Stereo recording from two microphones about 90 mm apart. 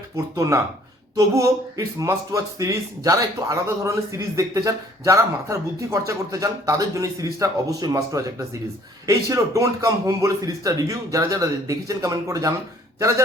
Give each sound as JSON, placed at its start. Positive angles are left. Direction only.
{"t": 0.3, "sound": "speech", "side_deg": -35}